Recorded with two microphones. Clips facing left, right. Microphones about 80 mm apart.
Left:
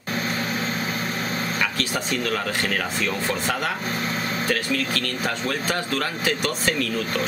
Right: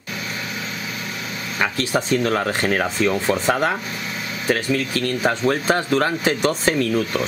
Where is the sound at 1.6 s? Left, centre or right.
Right.